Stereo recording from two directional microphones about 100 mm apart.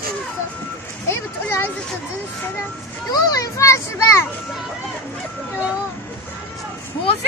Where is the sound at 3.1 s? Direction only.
40° left (ahead or behind).